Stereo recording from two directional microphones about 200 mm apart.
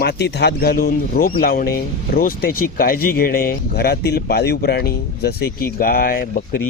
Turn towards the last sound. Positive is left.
turn(degrees=45)  # may be behind; listen again after turning